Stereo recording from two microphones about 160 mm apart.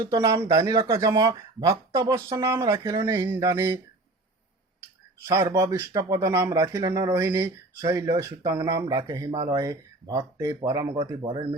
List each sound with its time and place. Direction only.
0.0 s speech: 25° right (ahead or behind)
5.3 s speech: 20° right (ahead or behind)
11.2 s speech: 30° right (ahead or behind)